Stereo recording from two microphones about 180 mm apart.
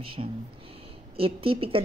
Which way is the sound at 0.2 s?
35° right (ahead or behind).